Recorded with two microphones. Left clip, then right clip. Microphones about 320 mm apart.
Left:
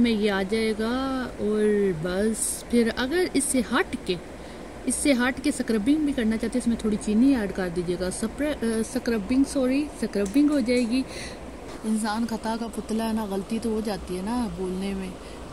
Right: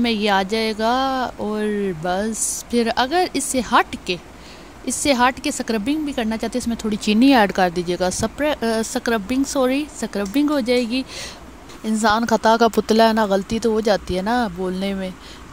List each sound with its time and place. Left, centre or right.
0.0 s speech: centre